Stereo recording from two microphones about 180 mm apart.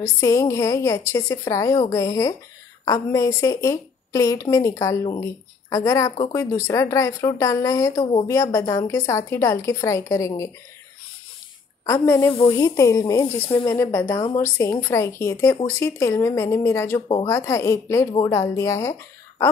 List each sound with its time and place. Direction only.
0.0 s a woman's voice: 20° left (ahead or behind)
8.0 s speech: 30° left (ahead or behind)
8.3 s a woman's voice: 15° left (ahead or behind)
11.8 s a woman's voice: 15° left (ahead or behind)
12.3 s speech: 30° left (ahead or behind)
12.5 s a woman's voice: 20° left (ahead or behind)